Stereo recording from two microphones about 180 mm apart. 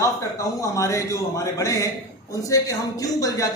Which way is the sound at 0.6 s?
15° left (ahead or behind).